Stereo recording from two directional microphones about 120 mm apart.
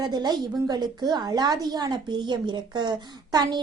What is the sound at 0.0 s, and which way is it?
A woman's voice, 35° right (ahead or behind).